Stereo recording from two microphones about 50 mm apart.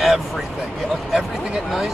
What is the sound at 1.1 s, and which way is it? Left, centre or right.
Speech, centre.